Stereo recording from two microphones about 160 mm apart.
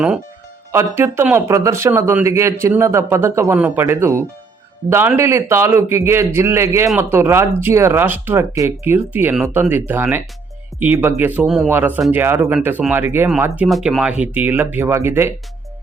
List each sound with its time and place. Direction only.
0.7 s speech: 15° right (ahead or behind)
11.4 s a man's voice: centre (ahead or behind)